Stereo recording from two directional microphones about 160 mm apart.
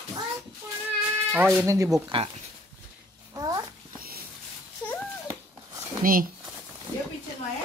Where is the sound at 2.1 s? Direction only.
35° right (ahead or behind).